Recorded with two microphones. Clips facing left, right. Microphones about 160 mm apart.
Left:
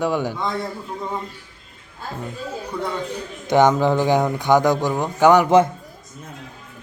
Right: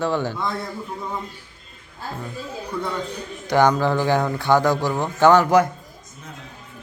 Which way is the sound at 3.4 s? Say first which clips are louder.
Left 2 dB; 20° left (ahead or behind).